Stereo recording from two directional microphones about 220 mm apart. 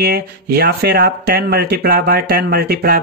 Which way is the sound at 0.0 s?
45° right (ahead or behind).